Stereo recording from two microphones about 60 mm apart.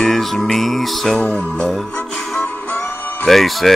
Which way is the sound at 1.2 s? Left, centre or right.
Left.